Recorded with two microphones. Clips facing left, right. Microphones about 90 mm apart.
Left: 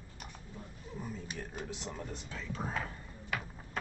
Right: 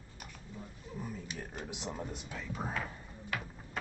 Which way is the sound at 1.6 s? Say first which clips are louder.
Even; 15° right (ahead or behind).